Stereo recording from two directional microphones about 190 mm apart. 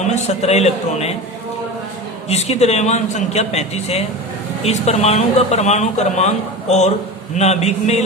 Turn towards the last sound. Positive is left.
turn(degrees=35)  # may be behind; listen again after turning